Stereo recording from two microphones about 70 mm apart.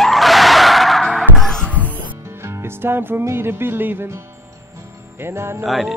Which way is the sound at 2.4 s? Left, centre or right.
Right.